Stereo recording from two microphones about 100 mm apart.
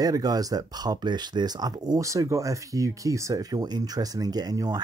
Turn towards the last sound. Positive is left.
turn(degrees=-40)  # may be behind; listen again after turning